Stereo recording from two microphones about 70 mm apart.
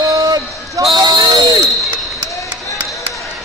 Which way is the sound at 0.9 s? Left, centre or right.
Right.